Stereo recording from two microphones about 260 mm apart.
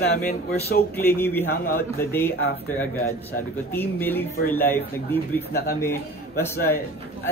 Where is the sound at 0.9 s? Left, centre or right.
Centre.